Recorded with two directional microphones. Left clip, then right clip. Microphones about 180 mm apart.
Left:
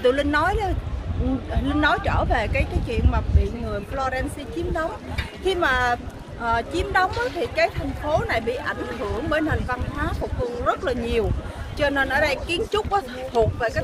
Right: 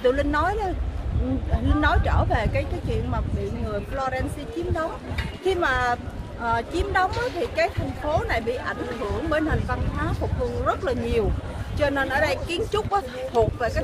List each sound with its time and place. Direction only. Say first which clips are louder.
0.0 s speech: left 2 dB; 30° left (ahead or behind)